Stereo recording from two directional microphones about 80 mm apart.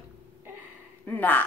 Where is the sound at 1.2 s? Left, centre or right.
Left.